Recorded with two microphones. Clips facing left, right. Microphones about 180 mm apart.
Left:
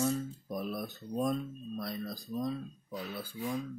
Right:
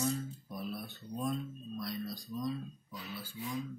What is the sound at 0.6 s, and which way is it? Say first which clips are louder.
Speech: left 4 dB; 45° left (ahead or behind).